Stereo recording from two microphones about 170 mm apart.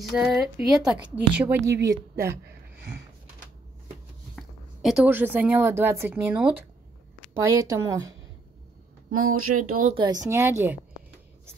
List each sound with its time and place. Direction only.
0.1 s a woman's voice: centre (ahead or behind)
1.8 s speech: 90° right
4.4 s speech: 5° right (ahead or behind); by 8.1 s 20° right (ahead or behind)
9.1 s speech: 50° right (ahead or behind)
9.9 s a woman's voice: 25° right (ahead or behind)